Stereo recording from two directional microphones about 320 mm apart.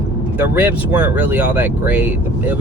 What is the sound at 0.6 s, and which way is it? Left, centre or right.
Speech, centre.